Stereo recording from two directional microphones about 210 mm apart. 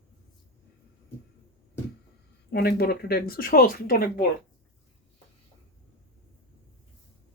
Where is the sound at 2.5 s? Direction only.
50° left (ahead or behind).